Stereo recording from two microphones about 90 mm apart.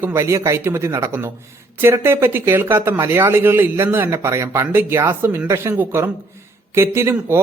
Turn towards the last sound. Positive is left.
turn(degrees=-30)  # may be behind; listen again after turning